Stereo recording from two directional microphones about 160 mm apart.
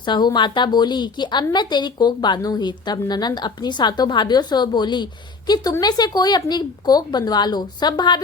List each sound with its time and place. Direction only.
0.0 s a woman's voice: 25° left (ahead or behind)